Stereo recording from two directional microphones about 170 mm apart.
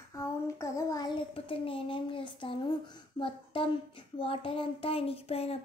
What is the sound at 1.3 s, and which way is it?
Speech, 30° left (ahead or behind).